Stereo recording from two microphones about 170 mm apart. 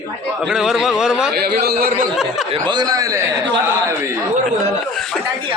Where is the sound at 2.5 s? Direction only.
25° right (ahead or behind).